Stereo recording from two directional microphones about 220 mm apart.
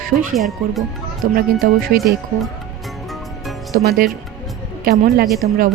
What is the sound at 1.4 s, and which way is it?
Speech, 40° right (ahead or behind).